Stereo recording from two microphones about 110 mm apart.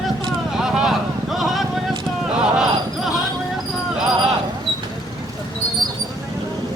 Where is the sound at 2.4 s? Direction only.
5° right (ahead or behind).